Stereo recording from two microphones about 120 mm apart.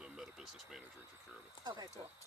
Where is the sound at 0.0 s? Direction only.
5° right (ahead or behind).